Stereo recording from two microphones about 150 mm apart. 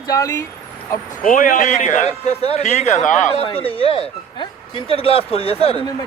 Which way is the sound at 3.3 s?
40° left (ahead or behind).